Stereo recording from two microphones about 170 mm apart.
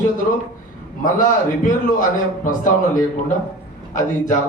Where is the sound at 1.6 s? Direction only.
50° left (ahead or behind).